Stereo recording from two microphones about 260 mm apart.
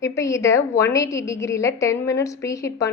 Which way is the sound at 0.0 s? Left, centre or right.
Centre.